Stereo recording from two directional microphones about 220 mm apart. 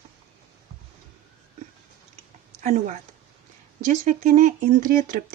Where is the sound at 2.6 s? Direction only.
35° right (ahead or behind).